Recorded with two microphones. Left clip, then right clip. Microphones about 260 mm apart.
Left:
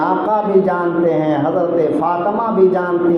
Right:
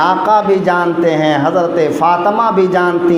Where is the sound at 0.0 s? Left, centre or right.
Right.